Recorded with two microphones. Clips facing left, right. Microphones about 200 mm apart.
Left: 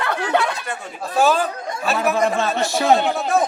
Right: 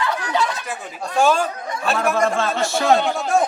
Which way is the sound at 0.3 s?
60° left (ahead or behind).